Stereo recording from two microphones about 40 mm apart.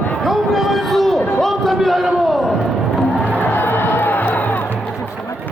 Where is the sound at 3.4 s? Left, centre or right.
Left.